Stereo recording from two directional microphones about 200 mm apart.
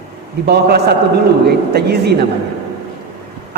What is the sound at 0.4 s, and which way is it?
A man's voice, 55° right (ahead or behind).